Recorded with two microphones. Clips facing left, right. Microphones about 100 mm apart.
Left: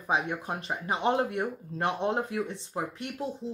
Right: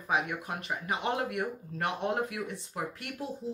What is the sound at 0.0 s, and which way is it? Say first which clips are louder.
Speech: left 2 dB; 30° left (ahead or behind).